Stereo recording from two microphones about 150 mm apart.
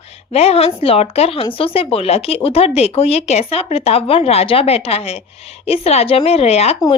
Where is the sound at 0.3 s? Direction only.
45° left (ahead or behind).